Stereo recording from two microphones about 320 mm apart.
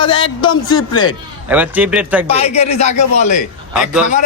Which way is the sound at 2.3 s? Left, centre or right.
Centre.